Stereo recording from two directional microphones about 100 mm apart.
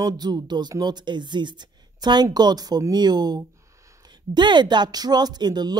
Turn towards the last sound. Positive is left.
turn(degrees=-45)  # may be behind; listen again after turning